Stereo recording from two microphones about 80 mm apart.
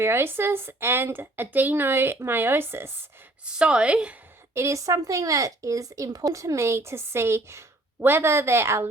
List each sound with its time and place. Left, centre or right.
0.0 s speech: right
3.4 s a woman's voice: centre
4.5 s speech: right